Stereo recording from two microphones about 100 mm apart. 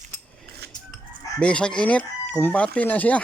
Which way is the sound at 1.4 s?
10° left (ahead or behind).